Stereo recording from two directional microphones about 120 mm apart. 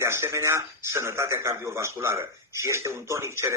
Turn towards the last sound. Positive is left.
turn(degrees=-20)  # may be behind; listen again after turning